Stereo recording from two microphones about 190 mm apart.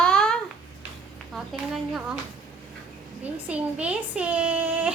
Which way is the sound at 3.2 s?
5° right (ahead or behind).